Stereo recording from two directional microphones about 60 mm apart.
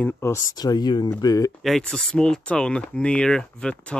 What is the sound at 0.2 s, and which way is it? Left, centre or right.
Speech, left.